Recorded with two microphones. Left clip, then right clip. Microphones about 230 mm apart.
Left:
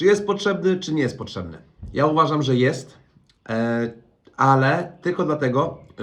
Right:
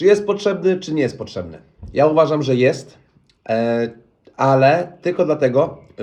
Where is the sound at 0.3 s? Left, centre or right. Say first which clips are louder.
Right 3 dB; right.